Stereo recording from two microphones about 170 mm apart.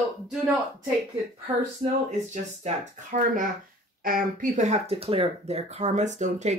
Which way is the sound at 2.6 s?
50° right (ahead or behind).